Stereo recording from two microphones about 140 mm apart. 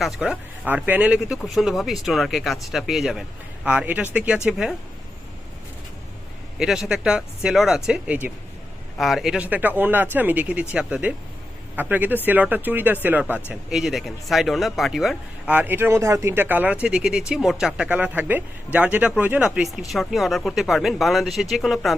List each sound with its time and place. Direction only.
0.0 s speech: 5° right (ahead or behind)
6.6 s speech: 5° right (ahead or behind)
15.5 s speech: 15° right (ahead or behind)